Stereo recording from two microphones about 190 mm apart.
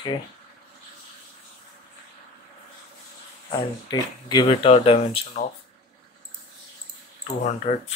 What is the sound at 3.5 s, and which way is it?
Speech, 25° left (ahead or behind).